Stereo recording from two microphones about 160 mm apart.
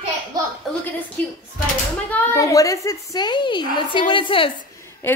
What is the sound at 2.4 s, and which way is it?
A woman's voice, 20° left (ahead or behind).